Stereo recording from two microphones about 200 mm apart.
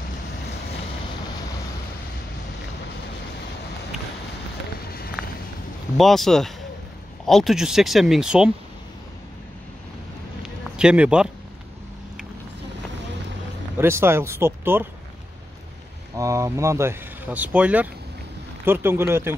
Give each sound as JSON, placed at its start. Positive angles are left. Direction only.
{"t": 4.8, "sound": "run", "side_deg": 50}
{"t": 5.9, "sound": "speech", "side_deg": 0}
{"t": 10.8, "sound": "speech", "side_deg": -5}
{"t": 13.7, "sound": "speech", "side_deg": -10}
{"t": 16.2, "sound": "speech", "side_deg": -15}